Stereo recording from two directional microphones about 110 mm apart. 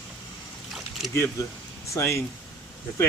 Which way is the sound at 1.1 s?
25° left (ahead or behind).